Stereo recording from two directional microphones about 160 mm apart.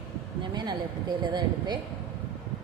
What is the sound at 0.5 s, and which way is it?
Speech, 25° right (ahead or behind).